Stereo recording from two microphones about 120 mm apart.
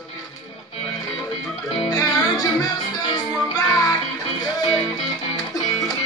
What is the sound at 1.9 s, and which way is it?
Music, 30° left (ahead or behind).